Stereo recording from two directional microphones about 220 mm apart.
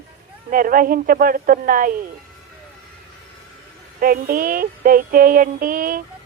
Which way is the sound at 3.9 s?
40° right (ahead or behind).